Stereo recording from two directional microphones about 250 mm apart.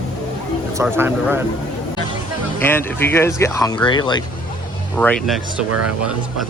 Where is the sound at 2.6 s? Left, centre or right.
Centre.